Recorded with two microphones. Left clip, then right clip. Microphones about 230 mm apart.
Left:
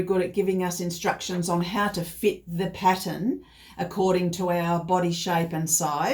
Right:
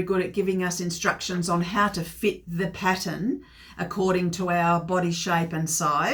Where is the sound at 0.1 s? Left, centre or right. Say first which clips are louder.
Left 1 dB; centre.